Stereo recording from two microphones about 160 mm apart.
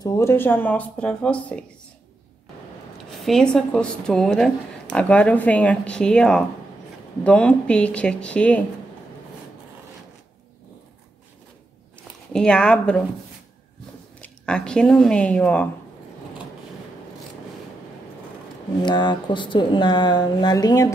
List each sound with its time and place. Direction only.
0.0 s speech: 15° left (ahead or behind)
3.1 s speech: 5° left (ahead or behind)
12.3 s speech: 5° left (ahead or behind)
14.2 s speech: 5° left (ahead or behind)
18.8 s speech: 30° left (ahead or behind)